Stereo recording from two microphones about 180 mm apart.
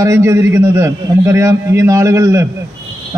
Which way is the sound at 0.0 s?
15° right (ahead or behind).